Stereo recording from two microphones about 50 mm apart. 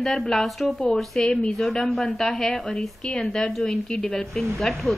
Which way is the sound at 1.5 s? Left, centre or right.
Centre.